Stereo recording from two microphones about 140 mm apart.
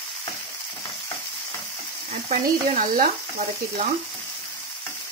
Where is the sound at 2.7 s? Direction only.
75° right (ahead or behind).